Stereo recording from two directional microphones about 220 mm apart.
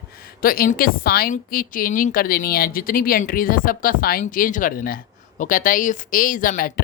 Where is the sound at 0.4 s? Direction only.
40° left (ahead or behind).